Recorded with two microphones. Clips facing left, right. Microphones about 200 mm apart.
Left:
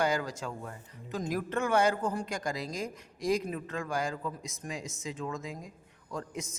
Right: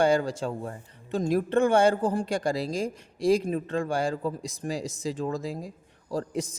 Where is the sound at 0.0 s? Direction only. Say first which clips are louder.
Right 7 dB; 30° right (ahead or behind).